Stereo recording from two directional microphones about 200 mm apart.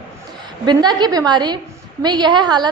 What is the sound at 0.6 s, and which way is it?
A woman's voice, 20° right (ahead or behind).